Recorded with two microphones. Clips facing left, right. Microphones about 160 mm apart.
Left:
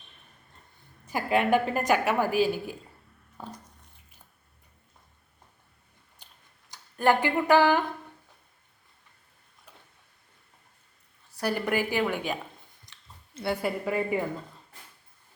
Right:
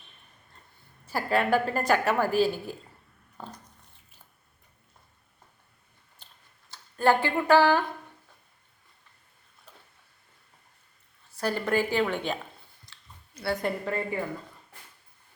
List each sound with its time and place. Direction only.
1.0 s a woman's voice: 15° left (ahead or behind)
3.3 s a sound: 10° left (ahead or behind)
6.2 s tick-tock: 15° left (ahead or behind)
6.7 s speech: 15° left (ahead or behind)
11.3 s a woman's voice: 15° left (ahead or behind)
12.8 s chewing: 20° left (ahead or behind)
13.6 s a woman's voice: 10° left (ahead or behind)